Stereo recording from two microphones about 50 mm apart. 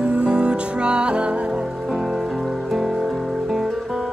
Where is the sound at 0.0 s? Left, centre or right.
Centre.